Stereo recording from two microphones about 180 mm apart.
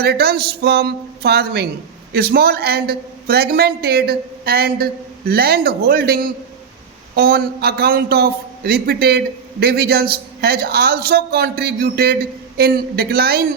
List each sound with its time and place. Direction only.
0.0 s a man's voice: 60° right (ahead or behind)